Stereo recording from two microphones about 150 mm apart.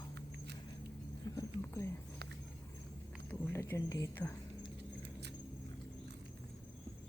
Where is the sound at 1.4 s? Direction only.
20° left (ahead or behind).